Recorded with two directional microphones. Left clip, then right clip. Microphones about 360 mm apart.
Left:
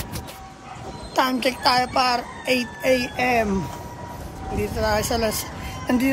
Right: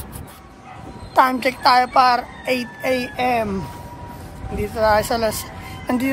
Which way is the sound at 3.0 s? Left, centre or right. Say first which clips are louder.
Right 2 dB; centre.